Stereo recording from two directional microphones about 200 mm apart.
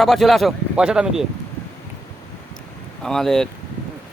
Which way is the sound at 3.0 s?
Centre (ahead or behind).